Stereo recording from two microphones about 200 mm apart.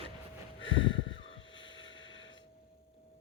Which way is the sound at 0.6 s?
75° left (ahead or behind).